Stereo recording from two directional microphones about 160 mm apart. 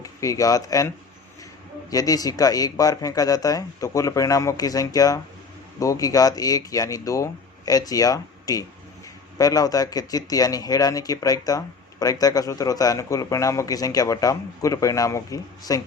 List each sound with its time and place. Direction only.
0.0 s speech: 20° left (ahead or behind)
1.9 s speech: 20° left (ahead or behind)